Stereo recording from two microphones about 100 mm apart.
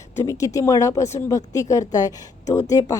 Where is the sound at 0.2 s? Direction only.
35° left (ahead or behind).